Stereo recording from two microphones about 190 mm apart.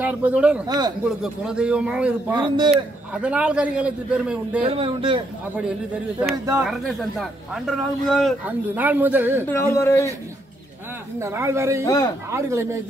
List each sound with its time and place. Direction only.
0.0 s speech: 5° right (ahead or behind)
0.7 s speech: 20° right (ahead or behind)
1.2 s a man's voice: 5° right (ahead or behind)
2.4 s speech: 25° right (ahead or behind)
2.7 s a man's voice: 5° right (ahead or behind)
4.6 s speech: 30° right (ahead or behind)
6.6 s a man's voice: centre (ahead or behind)
8.7 s speech: 10° right (ahead or behind)
9.5 s speech: 15° left (ahead or behind)
11.1 s speech: 15° right (ahead or behind)
11.8 s speech: 15° left (ahead or behind)
12.3 s speech: 15° right (ahead or behind)